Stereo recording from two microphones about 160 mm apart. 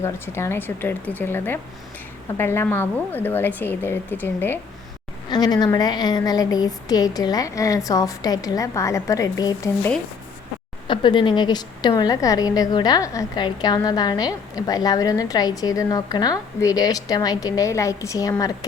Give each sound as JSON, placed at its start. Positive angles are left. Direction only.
{"t": 0.0, "sound": "a woman's voice", "side_deg": 15}
{"t": 5.3, "sound": "a woman's voice", "side_deg": 25}
{"t": 10.8, "sound": "a woman's voice", "side_deg": 30}